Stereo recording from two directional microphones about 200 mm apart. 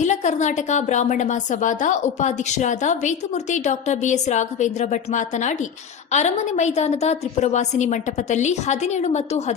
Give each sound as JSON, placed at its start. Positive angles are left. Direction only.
{"t": 0.0, "sound": "a woman's voice", "side_deg": 35}